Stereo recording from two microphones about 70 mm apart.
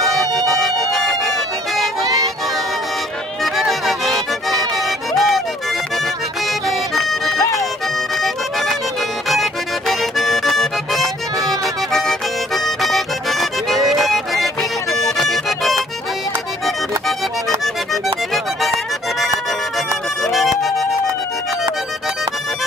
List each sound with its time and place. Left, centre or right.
0.0 s music: centre
2.0 s music: right
3.4 s music: centre
6.7 s music: centre
14.9 s accordion: centre
18.0 s music: centre
20.2 s music: centre